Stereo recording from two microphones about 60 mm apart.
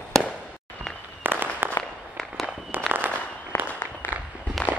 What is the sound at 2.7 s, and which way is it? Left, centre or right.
Fireworks, right.